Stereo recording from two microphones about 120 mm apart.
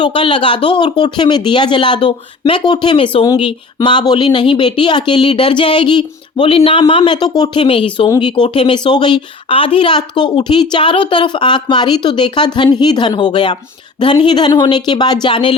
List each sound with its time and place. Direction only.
0.0 s speech: 45° left (ahead or behind)